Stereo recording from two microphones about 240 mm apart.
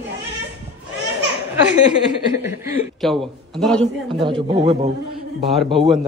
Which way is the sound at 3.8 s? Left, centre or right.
Right.